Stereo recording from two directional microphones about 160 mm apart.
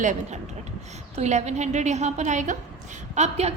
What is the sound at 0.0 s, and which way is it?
A woman's voice, 50° right (ahead or behind).